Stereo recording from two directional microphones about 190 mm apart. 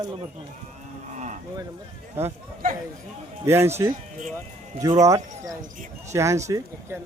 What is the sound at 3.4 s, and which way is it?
Speech, 15° right (ahead or behind).